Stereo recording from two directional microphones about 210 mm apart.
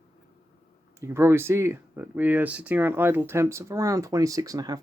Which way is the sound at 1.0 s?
15° right (ahead or behind).